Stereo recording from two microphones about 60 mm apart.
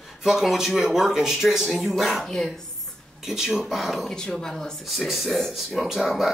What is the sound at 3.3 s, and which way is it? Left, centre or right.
Speech, centre.